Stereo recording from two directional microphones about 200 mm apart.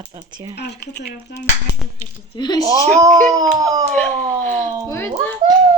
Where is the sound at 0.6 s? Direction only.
55° left (ahead or behind).